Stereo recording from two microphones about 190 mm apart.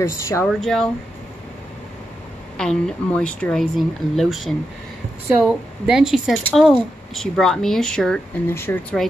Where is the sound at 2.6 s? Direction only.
5° left (ahead or behind).